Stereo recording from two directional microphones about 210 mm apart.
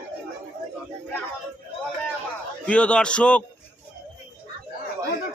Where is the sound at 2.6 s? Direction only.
5° left (ahead or behind).